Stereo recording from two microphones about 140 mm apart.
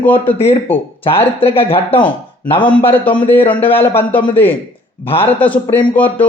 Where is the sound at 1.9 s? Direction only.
15° left (ahead or behind).